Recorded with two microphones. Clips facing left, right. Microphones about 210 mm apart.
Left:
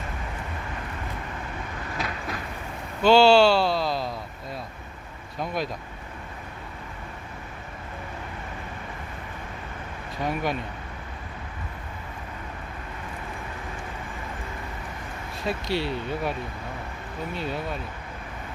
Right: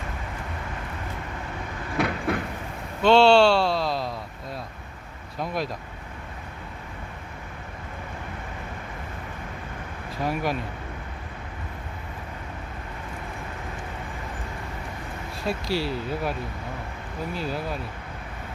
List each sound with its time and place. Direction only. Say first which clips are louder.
2.0 s vehicle: right 9 dB; 60° right (ahead or behind)
3.0 s speech: even; 5° left (ahead or behind)
5.4 s speech: even; centre (ahead or behind)
10.2 s speech: right 1 dB; centre (ahead or behind)
15.4 s speech: even; centre (ahead or behind)